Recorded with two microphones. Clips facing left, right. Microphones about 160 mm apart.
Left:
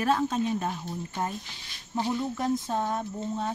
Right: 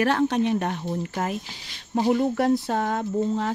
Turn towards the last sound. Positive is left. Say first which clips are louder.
# right 7 dB
turn(degrees=-90)